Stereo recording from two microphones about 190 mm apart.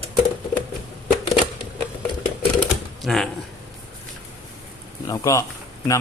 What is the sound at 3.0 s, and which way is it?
Speech, centre (ahead or behind).